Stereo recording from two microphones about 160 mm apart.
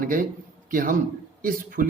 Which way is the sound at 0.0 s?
60° right (ahead or behind).